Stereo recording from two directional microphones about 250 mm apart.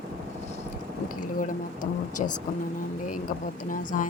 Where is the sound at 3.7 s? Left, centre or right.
Left.